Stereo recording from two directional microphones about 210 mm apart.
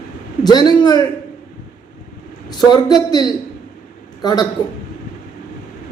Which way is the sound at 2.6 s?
20° left (ahead or behind).